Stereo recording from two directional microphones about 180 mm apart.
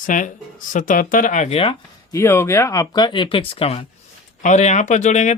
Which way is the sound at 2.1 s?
15° left (ahead or behind).